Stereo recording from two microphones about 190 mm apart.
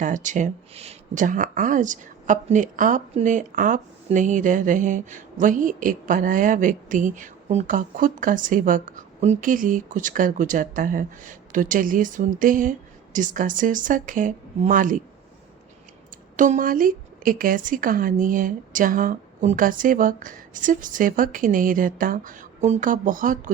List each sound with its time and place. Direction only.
0.0 s speech: 40° right (ahead or behind)
16.4 s speech: 45° right (ahead or behind)